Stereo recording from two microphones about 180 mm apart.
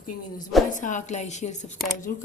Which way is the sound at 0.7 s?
45° left (ahead or behind).